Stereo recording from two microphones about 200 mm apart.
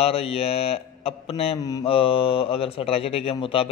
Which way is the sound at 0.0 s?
30° left (ahead or behind).